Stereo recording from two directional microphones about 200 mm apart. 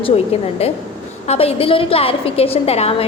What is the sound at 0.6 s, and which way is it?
A woman's voice, 30° left (ahead or behind).